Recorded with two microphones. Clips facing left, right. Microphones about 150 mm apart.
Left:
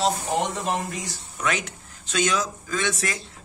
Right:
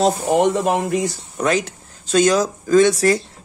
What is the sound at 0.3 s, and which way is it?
Speech, 60° right (ahead or behind).